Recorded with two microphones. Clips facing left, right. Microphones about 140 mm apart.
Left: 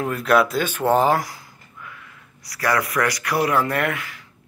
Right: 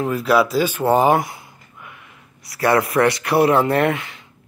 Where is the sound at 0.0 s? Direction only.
Centre (ahead or behind).